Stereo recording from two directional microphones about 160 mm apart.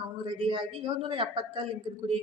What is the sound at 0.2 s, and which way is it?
A woman's voice, 30° right (ahead or behind).